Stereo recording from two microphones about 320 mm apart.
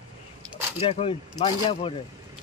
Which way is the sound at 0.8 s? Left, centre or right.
Centre.